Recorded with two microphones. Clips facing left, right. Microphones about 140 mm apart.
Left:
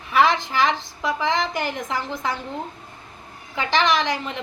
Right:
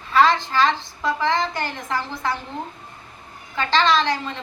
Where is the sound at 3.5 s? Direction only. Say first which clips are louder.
Right 1 dB; 15° left (ahead or behind).